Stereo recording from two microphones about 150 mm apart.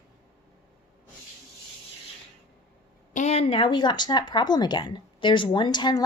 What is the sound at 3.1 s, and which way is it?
Speech, 45° left (ahead or behind).